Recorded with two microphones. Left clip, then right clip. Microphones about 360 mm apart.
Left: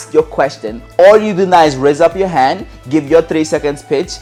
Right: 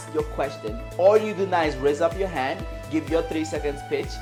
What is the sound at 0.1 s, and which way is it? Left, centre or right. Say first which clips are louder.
Speech: left 15 dB; left.